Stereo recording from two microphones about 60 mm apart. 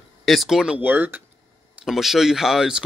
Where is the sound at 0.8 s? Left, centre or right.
Right.